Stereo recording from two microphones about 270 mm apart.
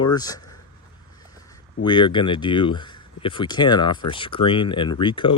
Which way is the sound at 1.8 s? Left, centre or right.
Centre.